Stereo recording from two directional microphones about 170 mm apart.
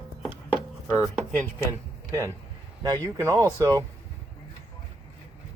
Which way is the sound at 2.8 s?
20° right (ahead or behind).